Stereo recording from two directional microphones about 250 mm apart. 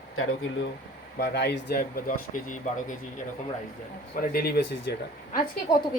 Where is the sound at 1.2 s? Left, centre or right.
Left.